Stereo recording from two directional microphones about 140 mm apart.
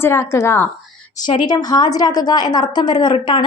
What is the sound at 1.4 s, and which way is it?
A woman's voice, 30° left (ahead or behind).